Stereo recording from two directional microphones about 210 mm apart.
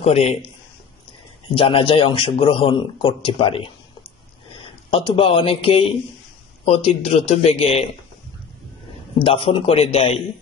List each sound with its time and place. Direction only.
0.0 s speech: 30° left (ahead or behind)
1.5 s speech: 25° left (ahead or behind)
9.2 s speech: 25° left (ahead or behind)